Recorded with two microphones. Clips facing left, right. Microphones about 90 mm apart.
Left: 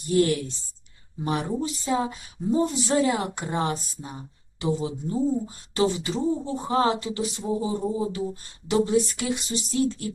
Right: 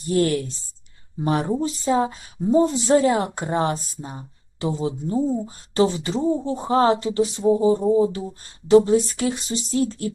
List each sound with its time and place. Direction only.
0.1 s speech: 40° right (ahead or behind)